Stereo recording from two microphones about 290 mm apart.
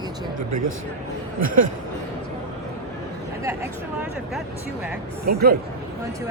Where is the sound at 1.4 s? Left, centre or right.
Right.